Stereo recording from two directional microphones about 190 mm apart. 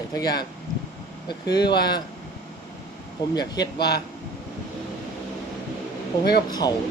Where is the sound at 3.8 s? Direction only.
60° left (ahead or behind).